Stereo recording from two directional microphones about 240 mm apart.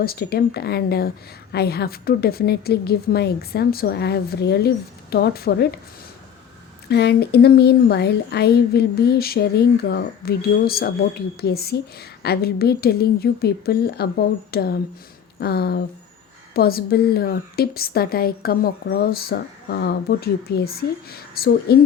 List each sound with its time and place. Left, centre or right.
0.0 s a woman's voice: left
6.8 s a woman's voice: left